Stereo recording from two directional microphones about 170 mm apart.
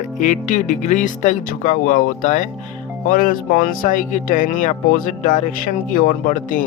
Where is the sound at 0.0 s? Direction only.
45° left (ahead or behind).